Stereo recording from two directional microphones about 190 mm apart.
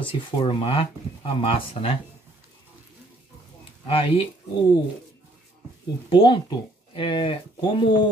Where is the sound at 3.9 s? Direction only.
30° left (ahead or behind).